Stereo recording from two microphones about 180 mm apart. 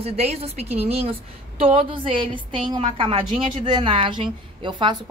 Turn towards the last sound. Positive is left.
turn(degrees=-25)  # may be behind; listen again after turning